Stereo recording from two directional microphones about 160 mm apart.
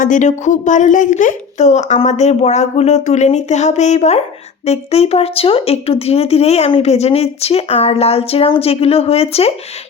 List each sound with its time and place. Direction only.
0.0 s speech: 50° left (ahead or behind)